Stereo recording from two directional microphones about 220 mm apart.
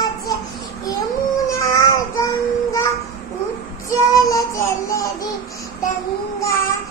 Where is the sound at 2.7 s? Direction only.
15° left (ahead or behind).